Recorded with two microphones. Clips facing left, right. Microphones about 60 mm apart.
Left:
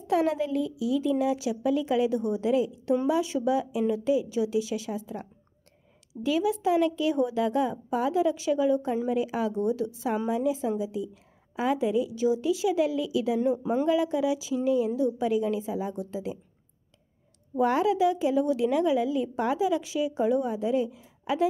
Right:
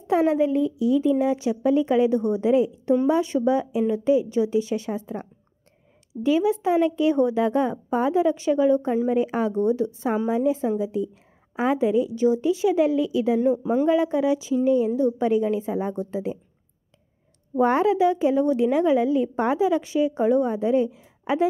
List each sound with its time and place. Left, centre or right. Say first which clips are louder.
0.0 s a woman's voice: right 5 dB; right
6.2 s a woman's voice: right 4 dB; right
15.6 s speech: right 5 dB; right
17.6 s a woman's voice: right 4 dB; right